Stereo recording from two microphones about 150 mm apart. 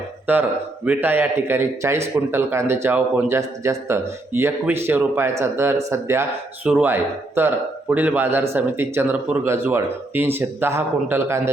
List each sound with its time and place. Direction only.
0.3 s a man's voice: 15° right (ahead or behind)